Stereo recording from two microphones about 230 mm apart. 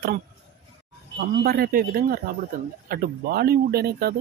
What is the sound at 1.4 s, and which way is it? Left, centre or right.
Speech, right.